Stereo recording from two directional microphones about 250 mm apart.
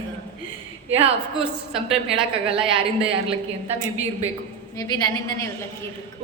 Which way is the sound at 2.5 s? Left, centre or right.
Right.